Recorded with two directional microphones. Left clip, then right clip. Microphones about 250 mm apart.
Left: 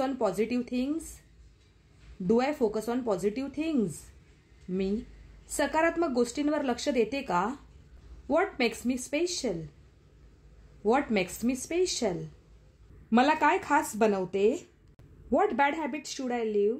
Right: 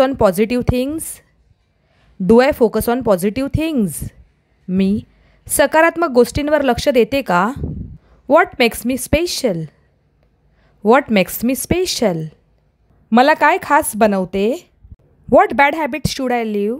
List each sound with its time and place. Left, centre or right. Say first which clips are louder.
0.0 s a woman's voice: right 15 dB; right
2.2 s a woman's voice: right 15 dB; right
10.8 s a woman's voice: right 14 dB; right